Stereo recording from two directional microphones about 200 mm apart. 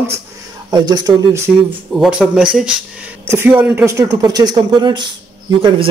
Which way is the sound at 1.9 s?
Centre (ahead or behind).